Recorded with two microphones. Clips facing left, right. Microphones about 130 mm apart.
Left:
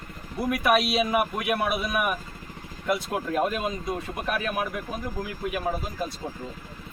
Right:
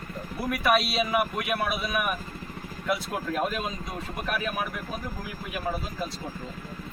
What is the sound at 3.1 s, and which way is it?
Speech, 20° left (ahead or behind).